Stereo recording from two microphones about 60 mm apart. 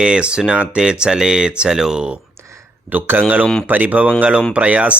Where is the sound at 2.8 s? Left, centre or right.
Right.